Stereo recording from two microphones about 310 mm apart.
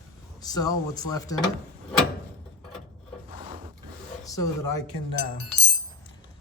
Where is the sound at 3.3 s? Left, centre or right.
Right.